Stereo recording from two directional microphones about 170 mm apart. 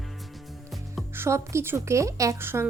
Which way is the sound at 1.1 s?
15° right (ahead or behind).